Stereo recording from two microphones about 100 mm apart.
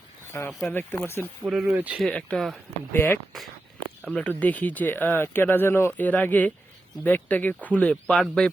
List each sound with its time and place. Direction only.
0.3 s speech: 20° left (ahead or behind)
1.5 s speech: 5° right (ahead or behind)
1.7 s speech: 15° right (ahead or behind)
2.1 s speech: 10° left (ahead or behind)
2.9 s speech: 20° left (ahead or behind); by 8.4 s 5° left (ahead or behind)